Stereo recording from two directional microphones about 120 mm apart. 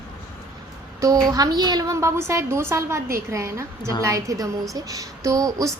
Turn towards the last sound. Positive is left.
turn(degrees=-30)  # may be behind; listen again after turning